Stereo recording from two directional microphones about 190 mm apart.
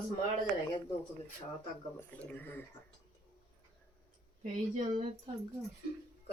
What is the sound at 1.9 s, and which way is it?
Speech, 10° left (ahead or behind).